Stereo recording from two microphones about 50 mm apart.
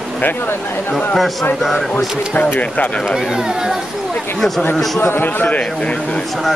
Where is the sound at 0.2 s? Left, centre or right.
Left.